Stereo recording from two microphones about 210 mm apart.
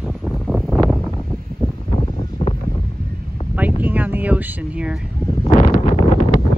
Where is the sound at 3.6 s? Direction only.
10° right (ahead or behind).